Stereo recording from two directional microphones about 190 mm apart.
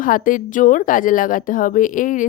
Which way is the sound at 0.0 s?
45° left (ahead or behind).